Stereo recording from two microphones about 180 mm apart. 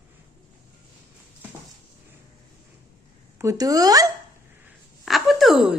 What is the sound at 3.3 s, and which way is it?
Speech, 20° right (ahead or behind).